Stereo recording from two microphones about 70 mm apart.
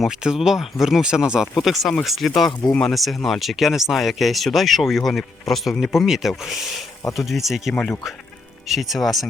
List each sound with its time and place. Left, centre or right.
0.1 s speech: centre
2.5 s speech: left
2.8 s speech: centre
7.7 s speech: centre
8.6 s speech: centre